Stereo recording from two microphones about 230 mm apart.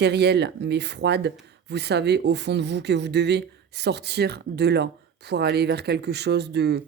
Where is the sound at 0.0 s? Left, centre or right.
Right.